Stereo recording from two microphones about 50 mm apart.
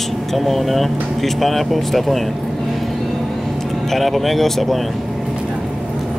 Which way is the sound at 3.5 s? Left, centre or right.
Centre.